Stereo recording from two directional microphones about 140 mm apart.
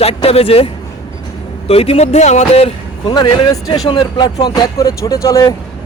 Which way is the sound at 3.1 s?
30° left (ahead or behind).